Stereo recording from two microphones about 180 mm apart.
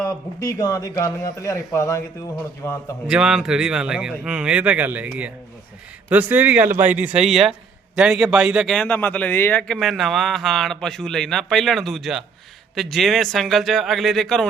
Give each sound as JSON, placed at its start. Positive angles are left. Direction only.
{"t": 0.0, "sound": "speech", "side_deg": 15}
{"t": 3.1, "sound": "a man's voice", "side_deg": -5}